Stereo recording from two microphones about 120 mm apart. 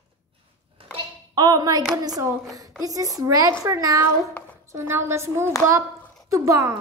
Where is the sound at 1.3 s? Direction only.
35° right (ahead or behind).